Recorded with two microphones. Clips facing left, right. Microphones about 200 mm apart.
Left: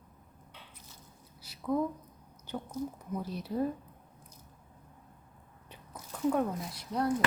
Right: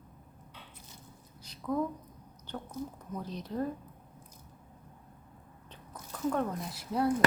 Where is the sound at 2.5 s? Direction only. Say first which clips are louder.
Left 3 dB; 10° left (ahead or behind).